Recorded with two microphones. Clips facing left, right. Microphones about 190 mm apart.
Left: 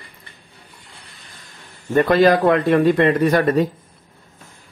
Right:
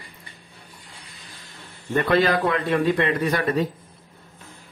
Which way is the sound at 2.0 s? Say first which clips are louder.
Left 6 dB; 40° left (ahead or behind).